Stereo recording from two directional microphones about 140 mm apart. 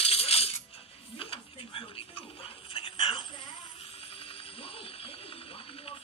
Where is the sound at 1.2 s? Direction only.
40° left (ahead or behind).